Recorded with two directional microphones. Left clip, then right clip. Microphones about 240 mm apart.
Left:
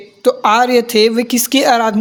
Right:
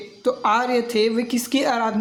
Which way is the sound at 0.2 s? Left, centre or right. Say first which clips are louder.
Left 8 dB; left.